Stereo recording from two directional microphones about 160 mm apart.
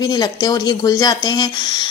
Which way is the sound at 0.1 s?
25° left (ahead or behind).